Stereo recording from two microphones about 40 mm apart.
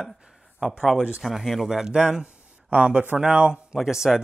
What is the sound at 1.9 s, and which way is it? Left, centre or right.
Speech, right.